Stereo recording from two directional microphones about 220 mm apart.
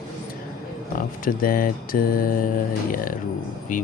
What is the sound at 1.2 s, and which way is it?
Speech, 40° left (ahead or behind).